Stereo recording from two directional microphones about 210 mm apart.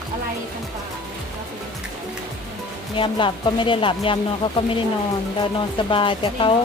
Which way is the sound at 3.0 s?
25° left (ahead or behind).